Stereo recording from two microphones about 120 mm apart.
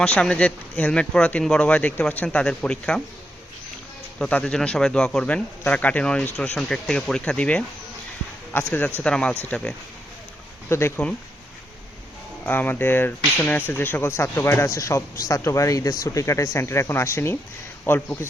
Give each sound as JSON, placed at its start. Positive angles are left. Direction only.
{"t": 0.0, "sound": "a man's voice", "side_deg": 10}
{"t": 4.2, "sound": "a man's voice", "side_deg": 10}
{"t": 10.7, "sound": "speech", "side_deg": 20}
{"t": 12.5, "sound": "a man's voice", "side_deg": 15}